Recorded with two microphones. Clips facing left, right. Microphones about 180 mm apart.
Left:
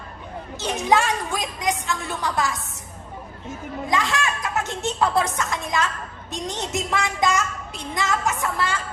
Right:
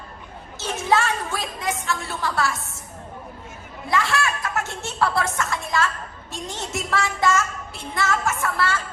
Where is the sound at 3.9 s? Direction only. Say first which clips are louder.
Right 1 dB; 15° left (ahead or behind).